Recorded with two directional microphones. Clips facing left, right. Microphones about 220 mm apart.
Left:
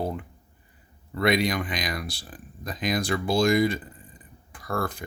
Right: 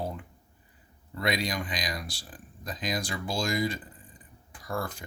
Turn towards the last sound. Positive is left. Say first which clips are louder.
# left 4 dB
turn(degrees=60)  # may be behind; listen again after turning